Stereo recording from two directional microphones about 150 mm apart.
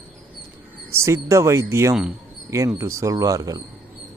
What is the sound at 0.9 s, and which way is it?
Speech, 20° right (ahead or behind).